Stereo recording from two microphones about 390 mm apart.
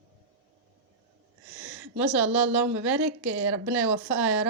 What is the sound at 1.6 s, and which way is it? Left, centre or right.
Speech, centre.